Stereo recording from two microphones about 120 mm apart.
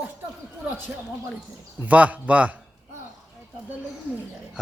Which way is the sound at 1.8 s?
10° right (ahead or behind).